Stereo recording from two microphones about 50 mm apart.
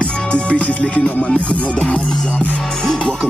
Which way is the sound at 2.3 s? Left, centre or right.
Left.